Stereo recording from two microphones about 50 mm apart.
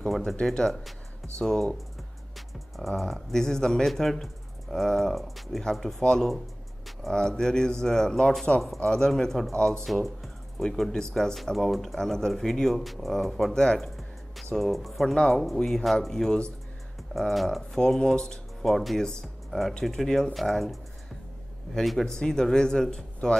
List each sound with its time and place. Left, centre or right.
0.2 s speech: centre
2.3 s music: centre
3.0 s speech: centre
10.6 s speech: centre
13.7 s music: centre
15.1 s speech: centre
17.7 s speech: centre
18.7 s speech: centre
19.2 s music: centre
19.8 s speech: centre
21.7 s speech: centre